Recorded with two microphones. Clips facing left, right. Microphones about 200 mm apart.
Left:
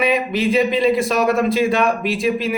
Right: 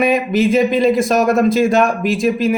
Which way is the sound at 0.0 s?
45° right (ahead or behind).